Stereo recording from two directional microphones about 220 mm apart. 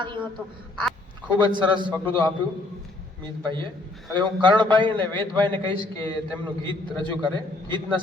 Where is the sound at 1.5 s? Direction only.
20° right (ahead or behind).